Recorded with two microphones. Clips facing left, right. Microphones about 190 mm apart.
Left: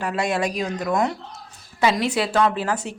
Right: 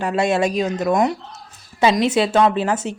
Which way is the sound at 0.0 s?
25° right (ahead or behind).